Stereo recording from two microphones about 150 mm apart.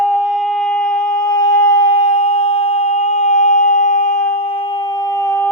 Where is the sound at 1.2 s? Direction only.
25° left (ahead or behind).